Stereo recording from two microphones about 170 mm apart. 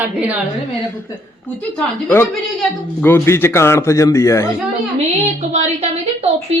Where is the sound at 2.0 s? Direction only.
15° left (ahead or behind).